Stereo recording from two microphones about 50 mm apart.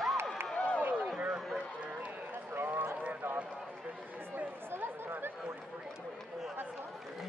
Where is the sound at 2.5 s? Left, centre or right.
Right.